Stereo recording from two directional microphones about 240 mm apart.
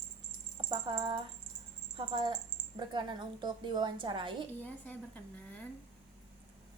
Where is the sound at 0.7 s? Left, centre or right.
Centre.